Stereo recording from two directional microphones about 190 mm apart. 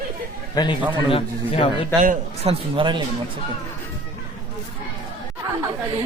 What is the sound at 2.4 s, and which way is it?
Speech, 25° right (ahead or behind).